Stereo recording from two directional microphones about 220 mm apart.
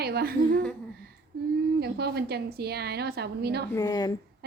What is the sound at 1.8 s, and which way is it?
A woman's voice, 45° right (ahead or behind).